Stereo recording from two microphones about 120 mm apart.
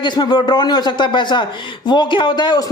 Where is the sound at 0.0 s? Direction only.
35° left (ahead or behind).